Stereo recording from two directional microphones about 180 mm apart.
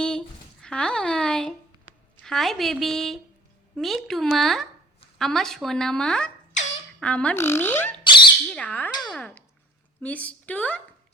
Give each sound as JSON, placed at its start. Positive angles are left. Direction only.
{"t": 0.0, "sound": "a sound", "side_deg": 5}
{"t": 2.2, "sound": "a woman's voice", "side_deg": 0}
{"t": 8.0, "sound": "squawk", "side_deg": 25}
{"t": 8.4, "sound": "bird", "side_deg": 5}
{"t": 9.0, "sound": "a woman's voice", "side_deg": 5}